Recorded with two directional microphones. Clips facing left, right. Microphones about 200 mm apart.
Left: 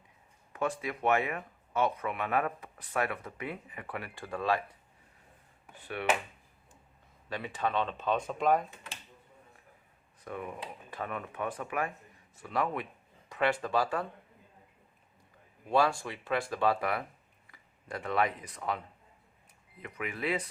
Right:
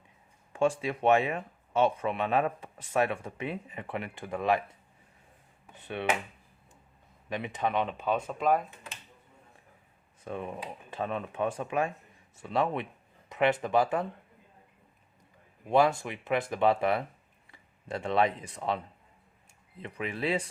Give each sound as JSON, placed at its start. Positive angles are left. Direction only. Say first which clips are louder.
{"t": 0.5, "sound": "speech", "louder": "right 6 dB", "side_deg": -30}
{"t": 7.3, "sound": "speech", "louder": "right 2 dB", "side_deg": -20}
{"t": 10.2, "sound": "speech", "louder": "right 3 dB", "side_deg": -25}
{"t": 15.7, "sound": "speech", "louder": "right 3 dB", "side_deg": -20}
{"t": 19.8, "sound": "speech", "louder": "right 3 dB", "side_deg": -30}